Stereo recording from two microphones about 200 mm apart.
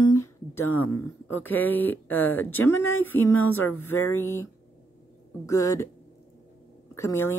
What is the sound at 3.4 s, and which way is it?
Speech, 90° left.